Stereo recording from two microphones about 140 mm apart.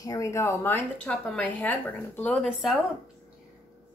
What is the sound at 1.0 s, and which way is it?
Speech, 5° left (ahead or behind).